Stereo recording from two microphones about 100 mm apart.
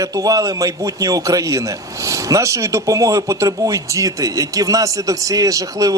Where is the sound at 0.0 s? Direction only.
35° right (ahead or behind).